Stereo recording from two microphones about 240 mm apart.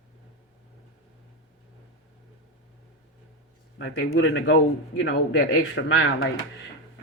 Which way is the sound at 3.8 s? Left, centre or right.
Left.